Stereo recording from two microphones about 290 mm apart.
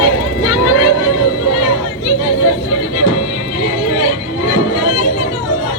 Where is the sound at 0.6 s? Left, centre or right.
Left.